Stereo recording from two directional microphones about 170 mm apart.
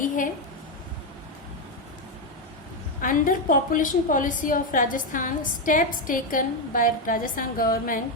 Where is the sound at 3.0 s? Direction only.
50° left (ahead or behind).